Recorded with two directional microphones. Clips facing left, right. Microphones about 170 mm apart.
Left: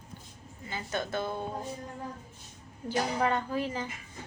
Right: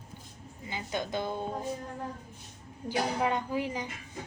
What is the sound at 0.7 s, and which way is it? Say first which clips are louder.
Speech: even; 15° right (ahead or behind).